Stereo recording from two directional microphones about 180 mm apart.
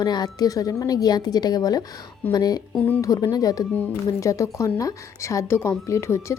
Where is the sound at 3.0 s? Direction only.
20° left (ahead or behind).